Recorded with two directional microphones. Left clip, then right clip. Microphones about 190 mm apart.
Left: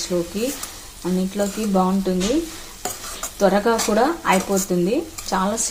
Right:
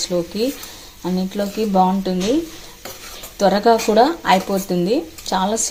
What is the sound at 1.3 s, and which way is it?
Frying, 30° right (ahead or behind).